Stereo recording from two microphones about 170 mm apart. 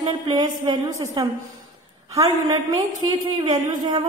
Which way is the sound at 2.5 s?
25° right (ahead or behind).